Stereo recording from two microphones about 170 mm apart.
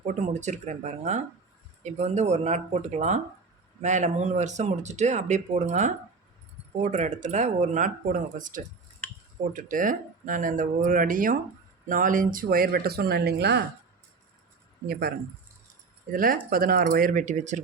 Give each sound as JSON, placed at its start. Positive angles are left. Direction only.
{"t": 0.0, "sound": "speech", "side_deg": -45}
{"t": 14.8, "sound": "speech", "side_deg": -65}
{"t": 16.1, "sound": "speech", "side_deg": -55}